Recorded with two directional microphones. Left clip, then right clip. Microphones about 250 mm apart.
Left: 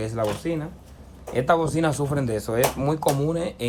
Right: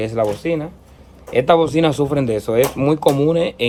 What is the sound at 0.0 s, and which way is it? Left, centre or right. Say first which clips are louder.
Speech: right 7 dB; right.